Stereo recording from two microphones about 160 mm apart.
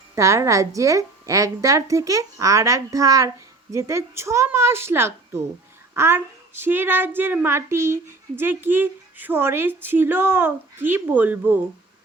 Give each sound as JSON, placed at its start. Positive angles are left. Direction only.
{"t": 0.2, "sound": "a woman's voice", "side_deg": -20}